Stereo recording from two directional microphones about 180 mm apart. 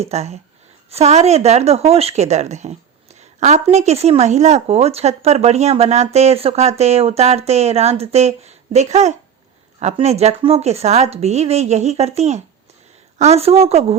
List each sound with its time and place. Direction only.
0.0 s speech: 35° right (ahead or behind)